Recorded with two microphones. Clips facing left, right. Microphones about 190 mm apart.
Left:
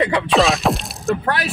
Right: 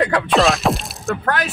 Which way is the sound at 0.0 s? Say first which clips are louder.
Even; centre (ahead or behind).